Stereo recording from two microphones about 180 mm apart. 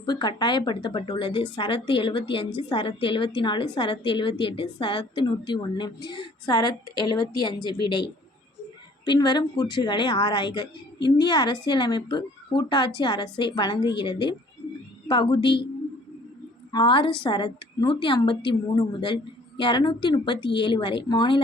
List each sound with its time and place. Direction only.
0.0 s a woman's voice: 25° left (ahead or behind)
9.0 s a woman's voice: 25° left (ahead or behind)
16.7 s a woman's voice: 25° left (ahead or behind)